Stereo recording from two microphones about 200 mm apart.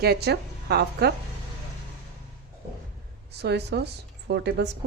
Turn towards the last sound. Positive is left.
turn(degrees=-55)  # may be behind; listen again after turning